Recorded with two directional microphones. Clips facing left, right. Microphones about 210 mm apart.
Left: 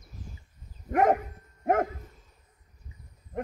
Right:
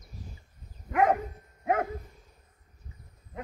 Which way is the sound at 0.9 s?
45° left (ahead or behind).